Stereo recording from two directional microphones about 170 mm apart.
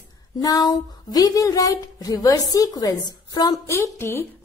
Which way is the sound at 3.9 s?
15° left (ahead or behind).